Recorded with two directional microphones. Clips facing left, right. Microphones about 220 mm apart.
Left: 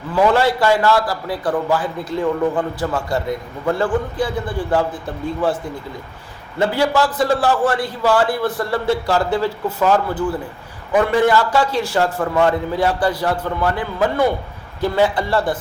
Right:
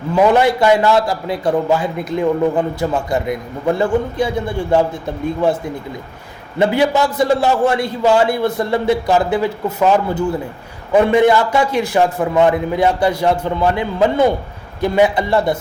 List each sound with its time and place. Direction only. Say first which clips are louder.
0.1 s a man's voice: right 3 dB; 20° right (ahead or behind)
6.6 s a man's voice: right 3 dB; 20° right (ahead or behind)